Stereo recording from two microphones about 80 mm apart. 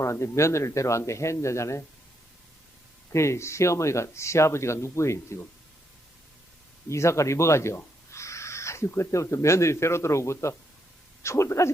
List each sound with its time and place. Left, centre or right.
0.0 s speech: left
3.1 s speech: left
6.8 s speech: left